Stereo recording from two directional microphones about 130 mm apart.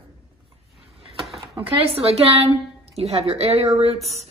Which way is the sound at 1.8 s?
45° right (ahead or behind).